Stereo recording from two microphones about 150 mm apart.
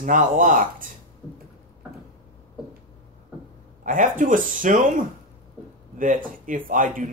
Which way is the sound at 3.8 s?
60° right (ahead or behind).